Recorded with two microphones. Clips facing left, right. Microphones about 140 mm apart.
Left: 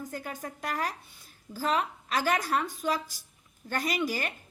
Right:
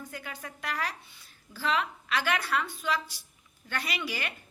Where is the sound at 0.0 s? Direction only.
40° left (ahead or behind).